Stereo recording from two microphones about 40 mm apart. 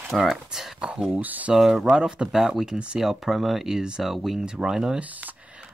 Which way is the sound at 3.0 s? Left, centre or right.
Centre.